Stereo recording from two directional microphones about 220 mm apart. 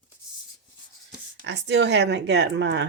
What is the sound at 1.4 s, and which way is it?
Speech, 50° right (ahead or behind).